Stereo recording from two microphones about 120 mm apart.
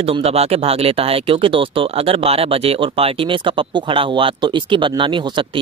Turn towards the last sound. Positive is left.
turn(degrees=-40)  # may be behind; listen again after turning